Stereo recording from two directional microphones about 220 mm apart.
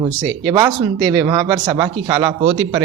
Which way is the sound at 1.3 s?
15° right (ahead or behind).